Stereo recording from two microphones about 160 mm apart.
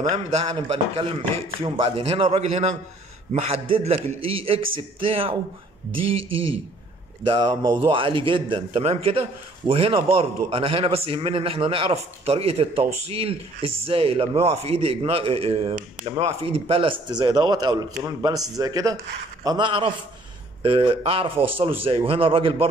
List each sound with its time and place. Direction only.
0.1 s a man's voice: 40° right (ahead or behind)
7.2 s a man's voice: 30° right (ahead or behind)